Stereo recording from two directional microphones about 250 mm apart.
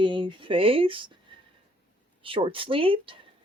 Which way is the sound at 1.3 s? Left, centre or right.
Centre.